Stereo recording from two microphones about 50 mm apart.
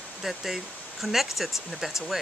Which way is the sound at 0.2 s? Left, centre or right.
Centre.